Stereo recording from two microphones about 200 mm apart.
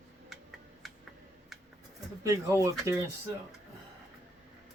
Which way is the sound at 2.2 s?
15° right (ahead or behind).